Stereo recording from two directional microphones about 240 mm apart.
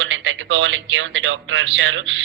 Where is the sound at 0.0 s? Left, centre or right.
Right.